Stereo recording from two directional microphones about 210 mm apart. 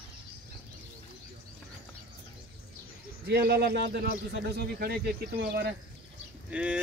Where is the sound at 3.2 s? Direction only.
50° right (ahead or behind).